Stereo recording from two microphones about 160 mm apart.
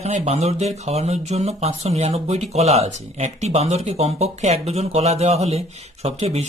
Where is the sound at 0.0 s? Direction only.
40° right (ahead or behind).